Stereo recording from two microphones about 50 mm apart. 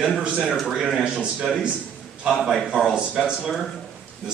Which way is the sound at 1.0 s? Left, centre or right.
Right.